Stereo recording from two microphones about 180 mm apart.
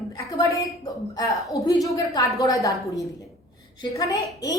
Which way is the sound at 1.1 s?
20° left (ahead or behind).